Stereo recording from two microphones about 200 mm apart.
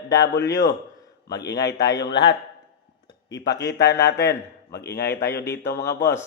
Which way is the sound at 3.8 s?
55° left (ahead or behind).